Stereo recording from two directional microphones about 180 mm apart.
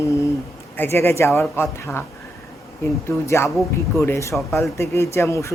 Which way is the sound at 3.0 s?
15° left (ahead or behind).